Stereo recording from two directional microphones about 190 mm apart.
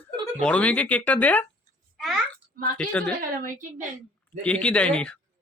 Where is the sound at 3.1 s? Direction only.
45° right (ahead or behind).